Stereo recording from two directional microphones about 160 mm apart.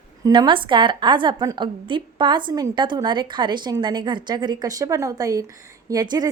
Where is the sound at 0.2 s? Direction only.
25° right (ahead or behind).